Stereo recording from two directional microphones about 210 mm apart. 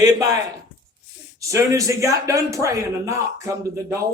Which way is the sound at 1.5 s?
15° right (ahead or behind).